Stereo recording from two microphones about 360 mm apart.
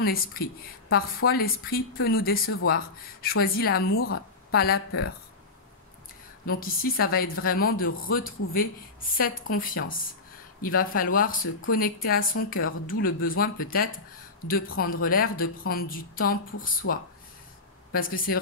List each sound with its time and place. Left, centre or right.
0.0 s speech: left
6.6 s speech: left
17.9 s speech: left